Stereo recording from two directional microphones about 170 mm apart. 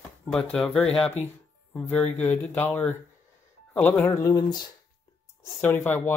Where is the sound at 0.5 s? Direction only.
5° left (ahead or behind); by 4.6 s 20° left (ahead or behind).